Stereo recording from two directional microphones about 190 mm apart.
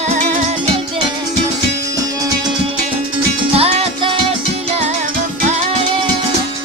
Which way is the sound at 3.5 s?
30° right (ahead or behind).